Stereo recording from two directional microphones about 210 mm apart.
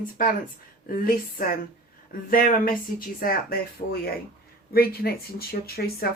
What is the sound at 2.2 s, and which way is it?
Speech, 45° left (ahead or behind).